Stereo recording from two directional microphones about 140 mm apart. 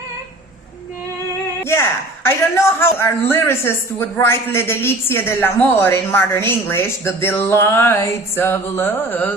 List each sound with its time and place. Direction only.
2.2 s a woman's voice: 15° left (ahead or behind)